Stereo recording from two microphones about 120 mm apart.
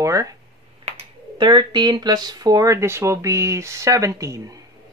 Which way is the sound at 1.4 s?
40° right (ahead or behind).